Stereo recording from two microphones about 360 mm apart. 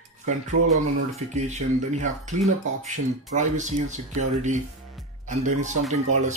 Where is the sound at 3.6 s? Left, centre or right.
Centre.